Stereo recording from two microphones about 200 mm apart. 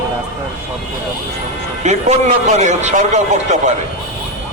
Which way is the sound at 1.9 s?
35° right (ahead or behind).